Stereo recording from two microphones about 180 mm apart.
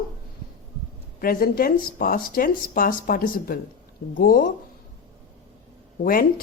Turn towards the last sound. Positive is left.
turn(degrees=50)  # may be behind; listen again after turning